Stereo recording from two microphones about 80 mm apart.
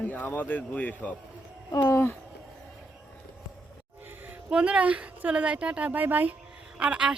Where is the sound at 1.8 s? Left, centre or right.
Left.